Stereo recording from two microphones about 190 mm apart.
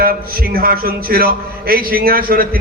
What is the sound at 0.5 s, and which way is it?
A man's voice, 50° right (ahead or behind).